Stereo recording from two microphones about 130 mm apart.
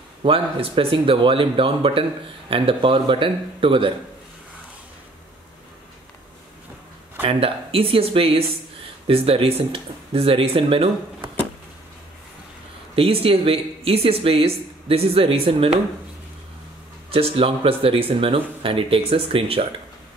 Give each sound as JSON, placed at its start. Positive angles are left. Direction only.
{"t": 0.2, "sound": "a woman's voice", "side_deg": -45}
{"t": 7.2, "sound": "a woman's voice", "side_deg": -45}
{"t": 12.9, "sound": "a woman's voice", "side_deg": -45}
{"t": 17.1, "sound": "a woman's voice", "side_deg": -45}